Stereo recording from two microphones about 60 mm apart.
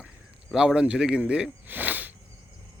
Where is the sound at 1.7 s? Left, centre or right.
Right.